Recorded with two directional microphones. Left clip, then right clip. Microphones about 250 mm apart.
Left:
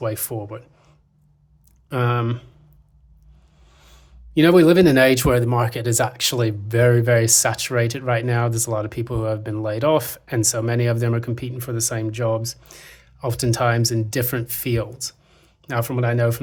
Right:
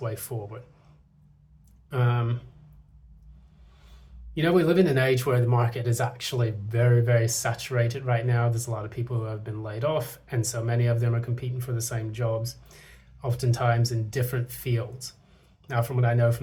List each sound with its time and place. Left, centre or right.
0.0 s speech: left
1.9 s speech: left
3.8 s speech: left